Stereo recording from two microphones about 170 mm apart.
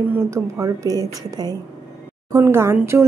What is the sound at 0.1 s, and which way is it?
Speech, 15° right (ahead or behind).